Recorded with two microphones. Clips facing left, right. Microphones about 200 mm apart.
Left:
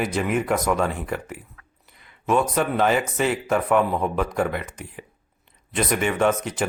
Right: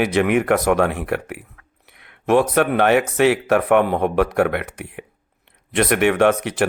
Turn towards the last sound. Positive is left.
turn(degrees=-65)  # may be behind; listen again after turning